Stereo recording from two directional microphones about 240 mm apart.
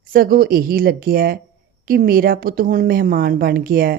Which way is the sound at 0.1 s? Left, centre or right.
Right.